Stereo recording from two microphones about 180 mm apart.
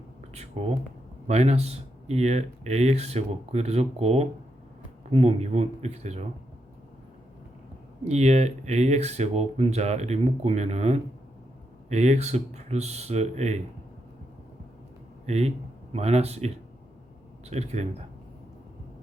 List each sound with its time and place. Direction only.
1.3 s speech: 35° right (ahead or behind)
8.0 s speech: 40° right (ahead or behind)
15.3 s speech: 35° right (ahead or behind)